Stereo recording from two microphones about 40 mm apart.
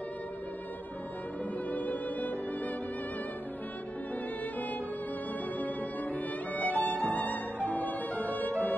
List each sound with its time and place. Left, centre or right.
1.7 s music: left
5.6 s violin: left
8.1 s music: left